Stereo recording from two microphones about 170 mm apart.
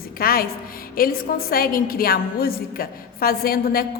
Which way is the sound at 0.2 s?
60° left (ahead or behind).